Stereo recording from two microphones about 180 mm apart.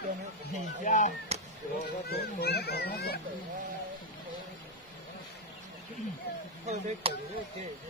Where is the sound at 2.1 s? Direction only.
60° left (ahead or behind).